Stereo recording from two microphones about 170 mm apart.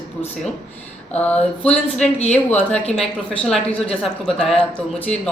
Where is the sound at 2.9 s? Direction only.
Centre (ahead or behind).